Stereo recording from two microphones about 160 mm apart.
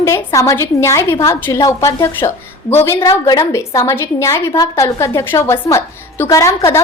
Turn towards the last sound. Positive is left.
turn(degrees=15)  # may be behind; listen again after turning